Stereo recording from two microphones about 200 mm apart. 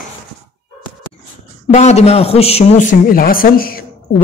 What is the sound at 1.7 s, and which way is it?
A man's voice, 35° left (ahead or behind).